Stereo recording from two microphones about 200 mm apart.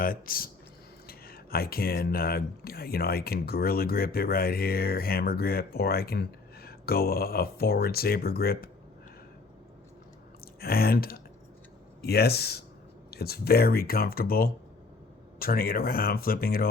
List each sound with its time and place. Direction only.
0.0 s speech: 45° left (ahead or behind)
10.4 s speech: 50° left (ahead or behind)